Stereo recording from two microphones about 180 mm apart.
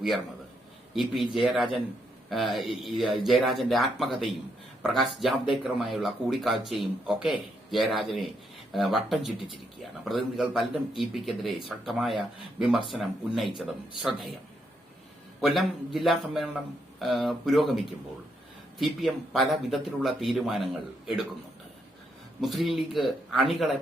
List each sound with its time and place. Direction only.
0.9 s a man's voice: centre (ahead or behind)
15.4 s a man's voice: centre (ahead or behind)
22.4 s a man's voice: centre (ahead or behind)